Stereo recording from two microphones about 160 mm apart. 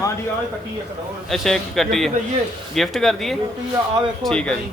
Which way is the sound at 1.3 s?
Centre (ahead or behind).